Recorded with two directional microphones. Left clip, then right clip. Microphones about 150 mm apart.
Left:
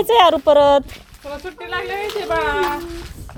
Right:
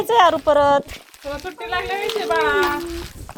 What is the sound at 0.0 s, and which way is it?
Speech, 85° left.